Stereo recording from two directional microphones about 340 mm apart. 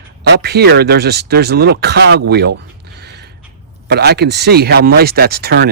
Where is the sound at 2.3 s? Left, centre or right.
Right.